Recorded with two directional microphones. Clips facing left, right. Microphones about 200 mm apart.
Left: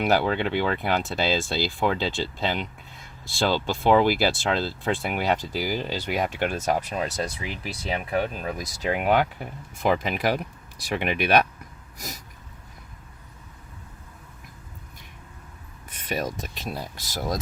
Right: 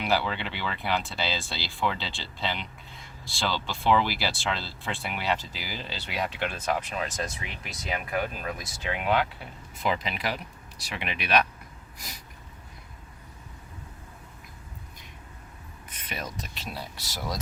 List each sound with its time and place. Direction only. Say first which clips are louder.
0.0 s speech: left 6 dB; 50° left (ahead or behind)
16.0 s speech: left 8 dB; 45° left (ahead or behind)